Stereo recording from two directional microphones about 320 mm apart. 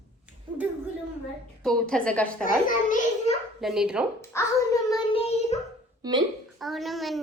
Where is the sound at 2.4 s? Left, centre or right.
Left.